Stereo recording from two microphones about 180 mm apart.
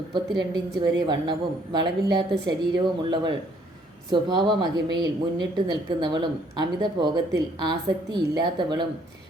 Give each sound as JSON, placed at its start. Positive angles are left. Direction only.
{"t": 0.1, "sound": "a woman's voice", "side_deg": -25}